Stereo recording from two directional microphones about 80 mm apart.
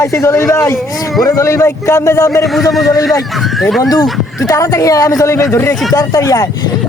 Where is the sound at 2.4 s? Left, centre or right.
Centre.